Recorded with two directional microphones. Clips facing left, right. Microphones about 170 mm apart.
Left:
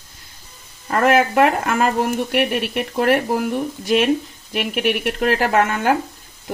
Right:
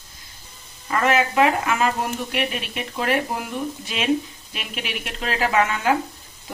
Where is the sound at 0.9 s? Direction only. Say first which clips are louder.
Left 4 dB; 55° left (ahead or behind).